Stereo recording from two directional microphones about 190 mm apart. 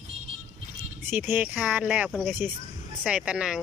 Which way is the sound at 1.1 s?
10° right (ahead or behind).